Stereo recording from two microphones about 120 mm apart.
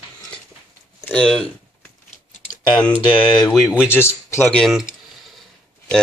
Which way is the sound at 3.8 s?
20° left (ahead or behind).